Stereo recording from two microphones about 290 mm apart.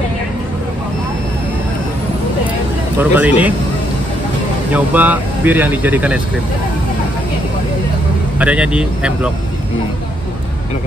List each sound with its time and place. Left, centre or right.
3.0 s speech: centre
4.7 s speech: centre
8.4 s speech: centre